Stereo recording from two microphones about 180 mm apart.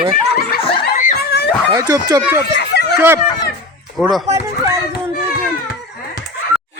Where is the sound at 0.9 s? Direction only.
45° left (ahead or behind).